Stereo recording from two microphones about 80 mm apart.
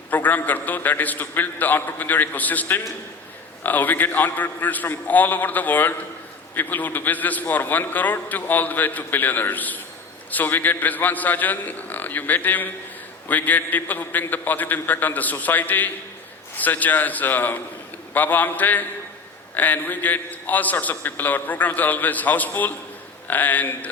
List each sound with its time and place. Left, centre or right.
0.1 s a man's voice: left